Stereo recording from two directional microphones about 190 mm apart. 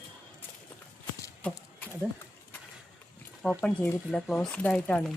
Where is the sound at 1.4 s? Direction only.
10° left (ahead or behind).